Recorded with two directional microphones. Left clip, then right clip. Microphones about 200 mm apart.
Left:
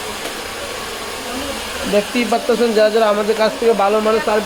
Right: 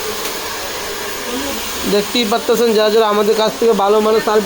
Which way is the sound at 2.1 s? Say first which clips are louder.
Right 2 dB; 20° right (ahead or behind).